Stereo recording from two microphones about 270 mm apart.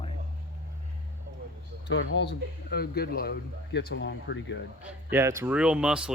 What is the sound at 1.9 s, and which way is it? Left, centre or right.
Speech, left.